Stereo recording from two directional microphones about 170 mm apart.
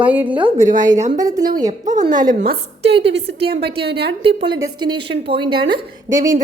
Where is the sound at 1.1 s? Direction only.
20° right (ahead or behind).